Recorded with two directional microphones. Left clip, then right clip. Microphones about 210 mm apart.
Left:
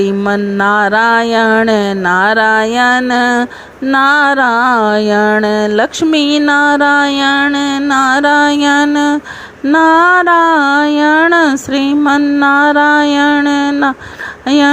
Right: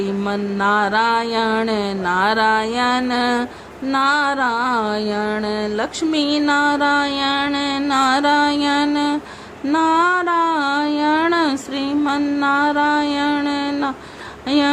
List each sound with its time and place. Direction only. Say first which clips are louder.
0.0 s music: left 9 dB; 30° left (ahead or behind)